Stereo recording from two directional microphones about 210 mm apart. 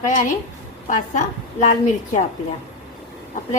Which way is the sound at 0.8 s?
35° left (ahead or behind).